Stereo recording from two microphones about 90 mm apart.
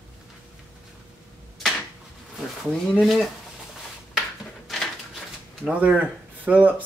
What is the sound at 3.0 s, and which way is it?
Speech, centre (ahead or behind).